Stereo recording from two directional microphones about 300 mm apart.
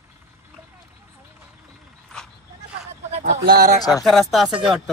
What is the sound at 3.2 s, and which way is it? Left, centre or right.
Speech, right.